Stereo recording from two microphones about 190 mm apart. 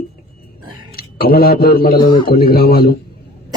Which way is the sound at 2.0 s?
25° left (ahead or behind).